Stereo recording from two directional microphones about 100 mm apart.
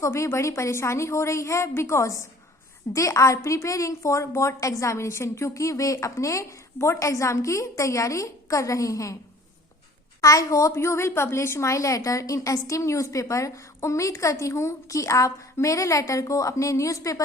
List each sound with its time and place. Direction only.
0.0 s a woman's voice: 30° left (ahead or behind)
10.2 s a woman's voice: 35° left (ahead or behind)